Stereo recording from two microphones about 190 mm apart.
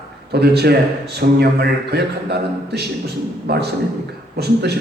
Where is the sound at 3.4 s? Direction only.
55° right (ahead or behind).